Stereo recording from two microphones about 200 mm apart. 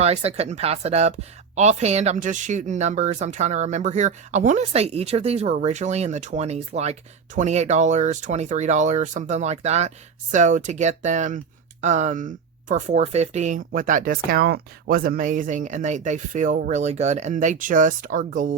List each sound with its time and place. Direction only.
0.0 s speech: 30° right (ahead or behind)